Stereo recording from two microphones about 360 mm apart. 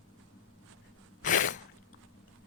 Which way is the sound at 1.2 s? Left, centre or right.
Left.